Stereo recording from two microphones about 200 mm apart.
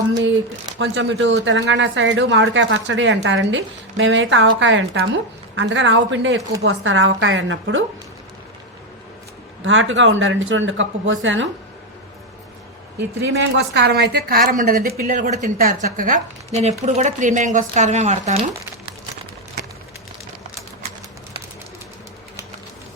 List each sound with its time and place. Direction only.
0.8 s a woman's voice: 60° right (ahead or behind)
9.6 s a woman's voice: 70° right (ahead or behind)
13.3 s a woman's voice: 60° right (ahead or behind); by 18.4 s 35° right (ahead or behind)